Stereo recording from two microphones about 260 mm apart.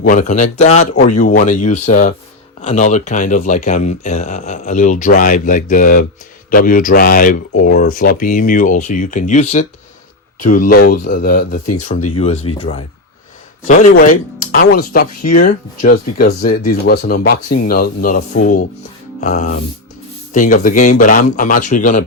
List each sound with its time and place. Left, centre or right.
0.0 s speech: left